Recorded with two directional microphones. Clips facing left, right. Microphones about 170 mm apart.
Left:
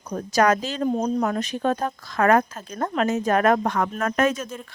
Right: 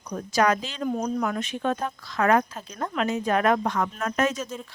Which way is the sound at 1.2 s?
40° left (ahead or behind).